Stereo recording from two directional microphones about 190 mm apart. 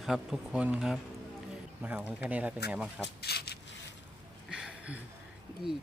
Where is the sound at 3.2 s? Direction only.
55° left (ahead or behind).